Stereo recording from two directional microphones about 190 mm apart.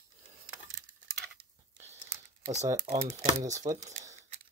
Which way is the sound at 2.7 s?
40° right (ahead or behind).